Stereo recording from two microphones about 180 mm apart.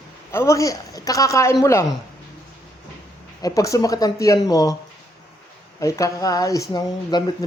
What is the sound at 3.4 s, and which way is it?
Speech, 20° left (ahead or behind).